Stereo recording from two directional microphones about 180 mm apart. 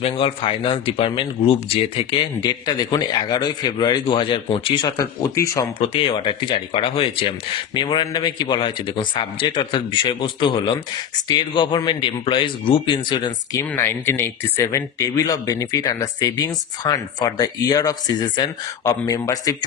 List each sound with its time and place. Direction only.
0.0 s a man's voice: 30° left (ahead or behind)
5.9 s a man's voice: 30° left (ahead or behind)